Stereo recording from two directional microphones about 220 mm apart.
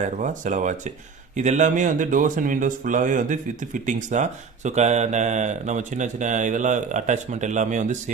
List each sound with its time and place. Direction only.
0.0 s speech: 35° right (ahead or behind)